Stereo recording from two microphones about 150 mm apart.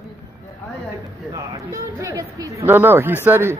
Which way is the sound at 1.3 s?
20° right (ahead or behind).